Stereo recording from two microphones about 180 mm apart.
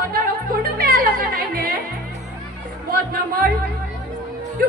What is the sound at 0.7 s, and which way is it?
Music, 50° right (ahead or behind).